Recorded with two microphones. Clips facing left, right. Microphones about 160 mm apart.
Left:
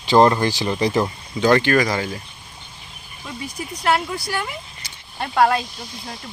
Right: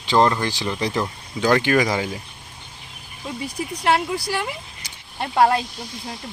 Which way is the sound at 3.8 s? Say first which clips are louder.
Even; 30° right (ahead or behind).